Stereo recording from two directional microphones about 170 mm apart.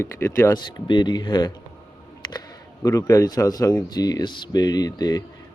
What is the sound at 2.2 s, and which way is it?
Camera, 25° left (ahead or behind).